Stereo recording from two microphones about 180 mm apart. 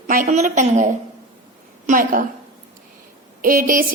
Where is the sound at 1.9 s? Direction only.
45° right (ahead or behind).